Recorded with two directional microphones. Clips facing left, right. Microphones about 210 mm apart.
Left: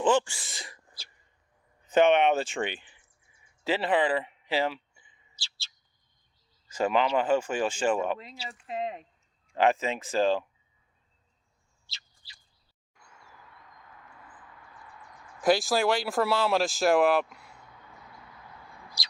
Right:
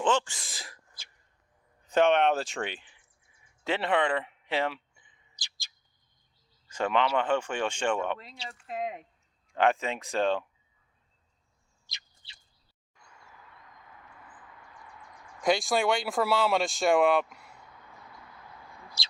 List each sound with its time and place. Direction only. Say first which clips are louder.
0.0 s speech: left 3 dB; 15° left (ahead or behind)
0.4 s speech: left 1 dB; centre (ahead or behind)
1.9 s speech: left 2 dB; 5° left (ahead or behind)
5.4 s bird: left 2 dB; 15° right (ahead or behind)
6.7 s speech: left 2 dB; 5° left (ahead or behind)
8.7 s speech: left 1 dB; 10° right (ahead or behind)
9.6 s speech: left 1 dB; centre (ahead or behind)
11.9 s bird: even; 20° right (ahead or behind)
15.4 s speech: left 2 dB; 5° left (ahead or behind)
19.0 s bird: even; 25° right (ahead or behind)